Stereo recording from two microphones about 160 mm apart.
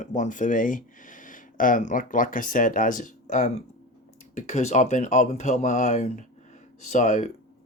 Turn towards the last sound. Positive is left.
turn(degrees=50)  # may be behind; listen again after turning